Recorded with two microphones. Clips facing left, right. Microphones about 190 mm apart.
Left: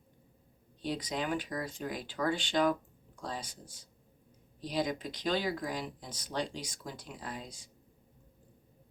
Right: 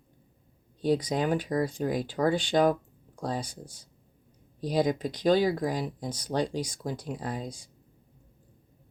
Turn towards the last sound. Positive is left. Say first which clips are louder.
# right 8 dB
turn(degrees=-40)  # may be behind; listen again after turning